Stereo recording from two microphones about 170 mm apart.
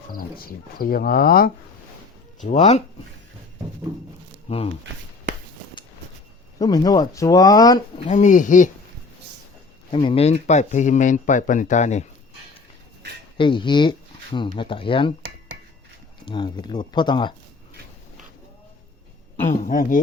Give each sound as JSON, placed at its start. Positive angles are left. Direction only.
{"t": 0.1, "sound": "speech", "side_deg": 60}
{"t": 2.4, "sound": "speech", "side_deg": 45}
{"t": 4.4, "sound": "speech", "side_deg": 35}
{"t": 6.6, "sound": "speech", "side_deg": 20}
{"t": 8.0, "sound": "speech", "side_deg": 45}
{"t": 9.9, "sound": "speech", "side_deg": 30}
{"t": 10.3, "sound": "speech", "side_deg": 45}
{"t": 13.3, "sound": "speech", "side_deg": 30}
{"t": 16.2, "sound": "speech", "side_deg": 25}
{"t": 19.5, "sound": "speech", "side_deg": 45}